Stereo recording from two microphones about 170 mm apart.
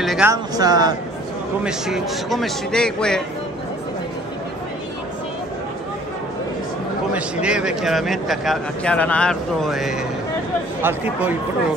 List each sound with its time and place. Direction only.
0.0 s a sound: centre (ahead or behind)
0.3 s speech: 20° right (ahead or behind)
1.6 s speech: 5° right (ahead or behind)
7.4 s speech: 5° right (ahead or behind)